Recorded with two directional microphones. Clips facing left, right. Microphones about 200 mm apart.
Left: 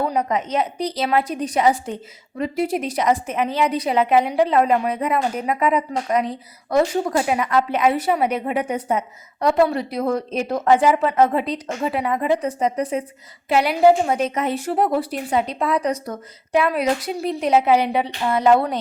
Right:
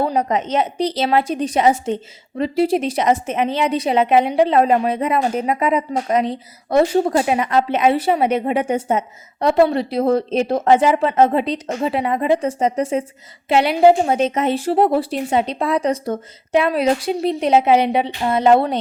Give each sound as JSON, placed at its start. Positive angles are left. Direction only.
{"t": 0.0, "sound": "a woman's voice", "side_deg": -30}